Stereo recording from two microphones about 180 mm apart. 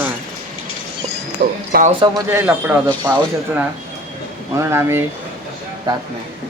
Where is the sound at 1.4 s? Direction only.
50° right (ahead or behind).